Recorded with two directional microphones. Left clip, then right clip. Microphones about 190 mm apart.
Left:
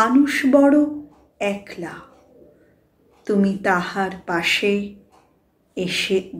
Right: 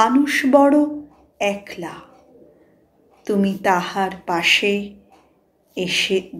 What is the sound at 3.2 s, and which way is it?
A woman's voice, 10° left (ahead or behind).